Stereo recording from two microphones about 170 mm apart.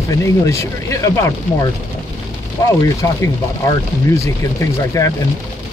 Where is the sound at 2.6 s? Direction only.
20° left (ahead or behind).